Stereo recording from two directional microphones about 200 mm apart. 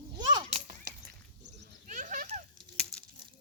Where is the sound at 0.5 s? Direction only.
40° right (ahead or behind).